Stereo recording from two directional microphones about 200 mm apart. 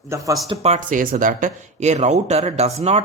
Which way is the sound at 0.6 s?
35° right (ahead or behind).